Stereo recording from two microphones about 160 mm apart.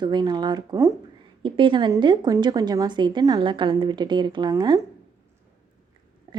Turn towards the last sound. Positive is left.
turn(degrees=-25)  # may be behind; listen again after turning